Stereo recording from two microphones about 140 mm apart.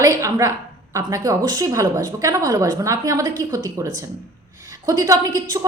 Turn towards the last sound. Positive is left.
turn(degrees=-25)  # may be behind; listen again after turning